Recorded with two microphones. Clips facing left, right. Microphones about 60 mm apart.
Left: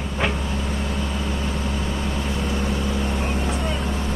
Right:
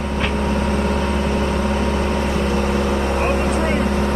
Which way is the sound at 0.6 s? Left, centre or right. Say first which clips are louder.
Right 7 dB; right.